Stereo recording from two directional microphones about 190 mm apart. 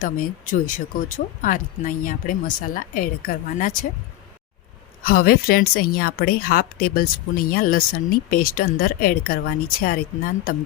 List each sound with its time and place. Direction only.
0.0 s speech: 45° left (ahead or behind)
5.0 s speech: 50° left (ahead or behind)